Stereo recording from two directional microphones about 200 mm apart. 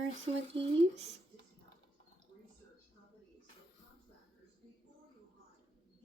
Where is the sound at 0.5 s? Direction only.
30° right (ahead or behind).